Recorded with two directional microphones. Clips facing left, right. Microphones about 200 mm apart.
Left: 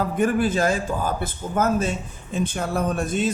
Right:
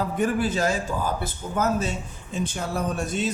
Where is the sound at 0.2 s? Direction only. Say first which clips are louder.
Left 3 dB; 50° left (ahead or behind).